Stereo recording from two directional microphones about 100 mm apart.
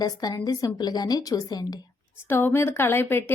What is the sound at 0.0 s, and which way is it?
A woman's voice, 40° left (ahead or behind).